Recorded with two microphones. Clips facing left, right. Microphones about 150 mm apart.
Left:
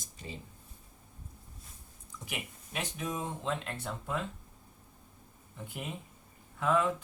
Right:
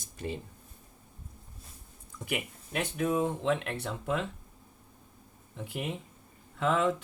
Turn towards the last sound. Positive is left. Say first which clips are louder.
# right 2 dB
turn(degrees=-80)